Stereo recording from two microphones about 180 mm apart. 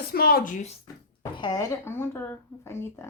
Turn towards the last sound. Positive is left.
turn(degrees=15)  # may be behind; listen again after turning